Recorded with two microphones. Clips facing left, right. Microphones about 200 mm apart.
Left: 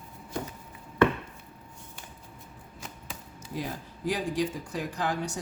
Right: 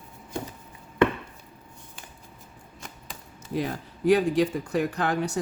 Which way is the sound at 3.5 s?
65° right (ahead or behind).